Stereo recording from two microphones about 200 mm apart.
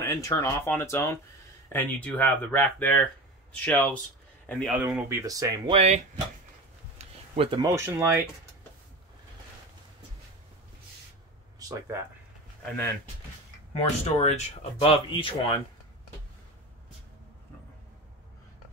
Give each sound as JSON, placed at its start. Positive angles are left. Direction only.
{"t": 0.0, "sound": "speech", "side_deg": 15}
{"t": 4.7, "sound": "speech", "side_deg": -10}
{"t": 5.8, "sound": "speech", "side_deg": -30}
{"t": 7.0, "sound": "a sound", "side_deg": -30}
{"t": 7.6, "sound": "speech", "side_deg": -15}
{"t": 13.7, "sound": "speech", "side_deg": 30}